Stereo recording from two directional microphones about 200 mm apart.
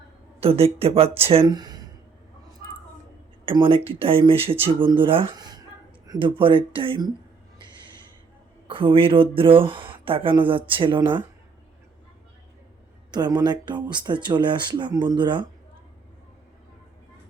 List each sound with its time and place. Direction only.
0.3 s speech: 30° right (ahead or behind)
3.4 s speech: 25° right (ahead or behind)
8.6 s speech: 25° right (ahead or behind)
13.1 s speech: 20° right (ahead or behind)